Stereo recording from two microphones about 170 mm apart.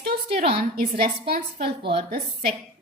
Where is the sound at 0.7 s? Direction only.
65° right (ahead or behind).